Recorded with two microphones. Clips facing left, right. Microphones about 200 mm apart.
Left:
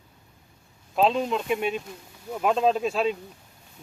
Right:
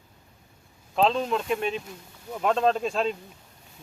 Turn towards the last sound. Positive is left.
turn(degrees=5)  # may be behind; listen again after turning